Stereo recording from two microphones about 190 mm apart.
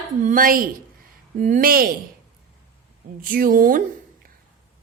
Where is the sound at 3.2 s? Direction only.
45° right (ahead or behind).